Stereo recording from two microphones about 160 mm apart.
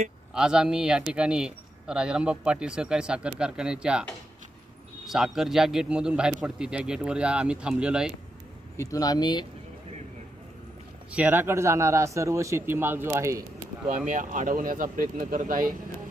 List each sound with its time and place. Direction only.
0.3 s a man's voice: 5° right (ahead or behind)
5.0 s a man's voice: centre (ahead or behind)
8.7 s speech: 20° left (ahead or behind)
11.1 s speech: 10° right (ahead or behind)
14.1 s speech: 55° right (ahead or behind)